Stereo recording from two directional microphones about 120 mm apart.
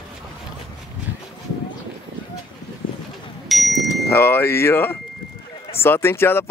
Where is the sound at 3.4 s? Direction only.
Centre (ahead or behind).